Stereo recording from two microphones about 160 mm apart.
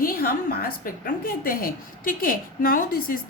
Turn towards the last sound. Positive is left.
turn(degrees=60)  # may be behind; listen again after turning